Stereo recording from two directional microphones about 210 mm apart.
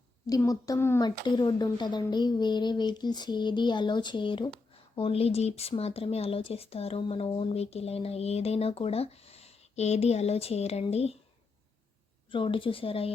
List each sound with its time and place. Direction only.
0.3 s speech: 15° left (ahead or behind)
12.3 s speech: 25° left (ahead or behind)